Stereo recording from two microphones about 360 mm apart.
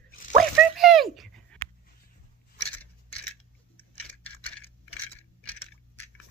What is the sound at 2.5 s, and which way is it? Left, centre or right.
Scissors, centre.